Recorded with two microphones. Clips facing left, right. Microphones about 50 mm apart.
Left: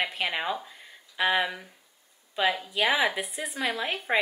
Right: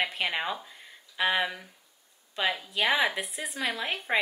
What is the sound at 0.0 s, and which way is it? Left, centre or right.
A woman's voice, centre.